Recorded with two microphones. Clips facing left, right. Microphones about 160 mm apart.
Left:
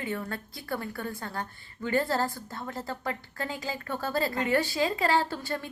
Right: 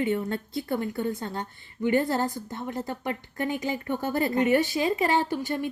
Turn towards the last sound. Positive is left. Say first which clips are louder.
# right 5 dB
turn(degrees=-15)  # may be behind; listen again after turning